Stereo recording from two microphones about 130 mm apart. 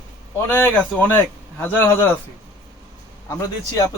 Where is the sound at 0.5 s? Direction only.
10° left (ahead or behind).